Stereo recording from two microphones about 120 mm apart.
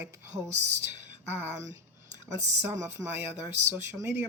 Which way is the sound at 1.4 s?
25° right (ahead or behind).